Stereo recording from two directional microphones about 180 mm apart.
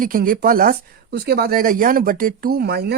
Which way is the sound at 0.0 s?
50° right (ahead or behind).